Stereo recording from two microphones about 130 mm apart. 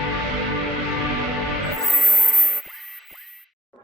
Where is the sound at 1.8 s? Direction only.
Centre (ahead or behind).